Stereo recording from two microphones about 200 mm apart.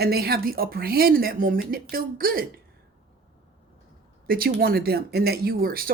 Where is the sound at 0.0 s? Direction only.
50° right (ahead or behind).